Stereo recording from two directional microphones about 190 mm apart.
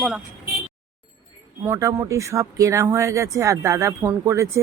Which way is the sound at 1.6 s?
15° right (ahead or behind).